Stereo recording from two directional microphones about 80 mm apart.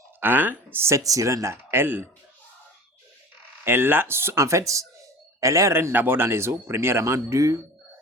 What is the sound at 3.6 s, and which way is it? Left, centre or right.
Speech, right.